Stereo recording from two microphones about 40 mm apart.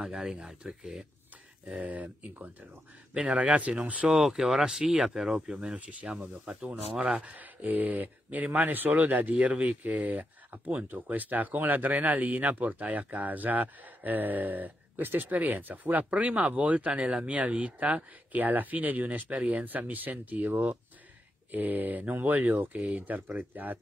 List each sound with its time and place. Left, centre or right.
0.0 s speech: centre
1.7 s speech: right
3.2 s speech: right
4.1 s speech: centre
5.8 s speech: right